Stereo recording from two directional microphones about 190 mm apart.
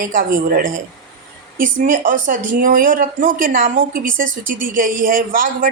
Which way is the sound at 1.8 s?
45° right (ahead or behind).